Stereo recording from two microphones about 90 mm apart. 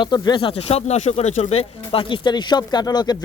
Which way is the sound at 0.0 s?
55° left (ahead or behind).